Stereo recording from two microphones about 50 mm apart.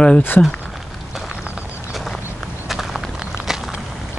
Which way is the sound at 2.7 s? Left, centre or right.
Centre.